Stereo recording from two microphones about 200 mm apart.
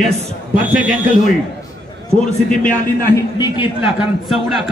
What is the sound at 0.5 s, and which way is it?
Speech, 5° right (ahead or behind).